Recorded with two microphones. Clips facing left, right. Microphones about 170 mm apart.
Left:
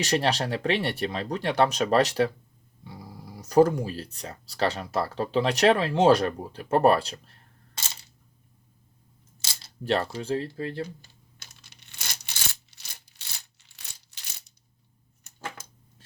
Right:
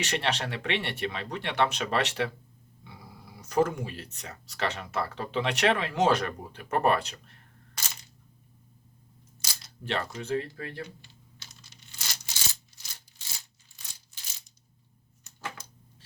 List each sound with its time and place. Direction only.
0.0 s speech: 35° left (ahead or behind)
9.4 s speech: 25° left (ahead or behind)
11.0 s tearing: 50° left (ahead or behind); by 14.2 s 70° left (ahead or behind)